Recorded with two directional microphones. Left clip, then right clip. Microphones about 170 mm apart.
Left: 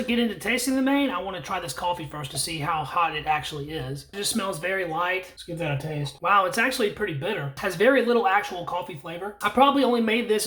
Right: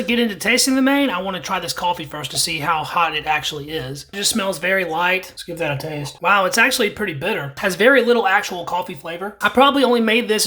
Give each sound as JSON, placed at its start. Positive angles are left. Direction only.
{"t": 0.0, "sound": "speech", "side_deg": -25}